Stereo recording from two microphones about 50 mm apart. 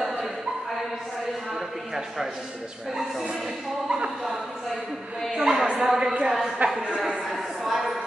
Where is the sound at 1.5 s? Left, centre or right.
Centre.